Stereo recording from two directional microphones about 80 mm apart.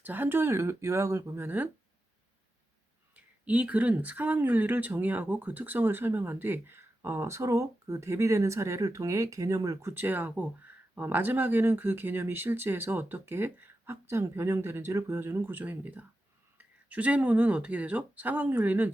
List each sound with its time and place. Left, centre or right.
0.0 s speech: right
3.4 s speech: centre; by 9.9 s right
9.9 s speech: right